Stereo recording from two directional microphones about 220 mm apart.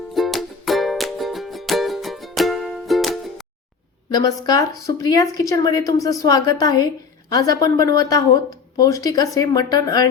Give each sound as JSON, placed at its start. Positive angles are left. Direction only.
{"t": 0.1, "sound": "music", "side_deg": 0}
{"t": 4.1, "sound": "a woman's voice", "side_deg": 15}